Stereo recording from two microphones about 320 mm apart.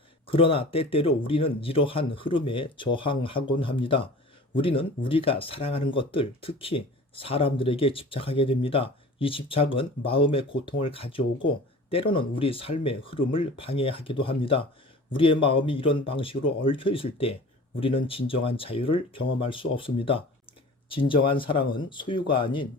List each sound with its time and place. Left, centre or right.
0.3 s speech: centre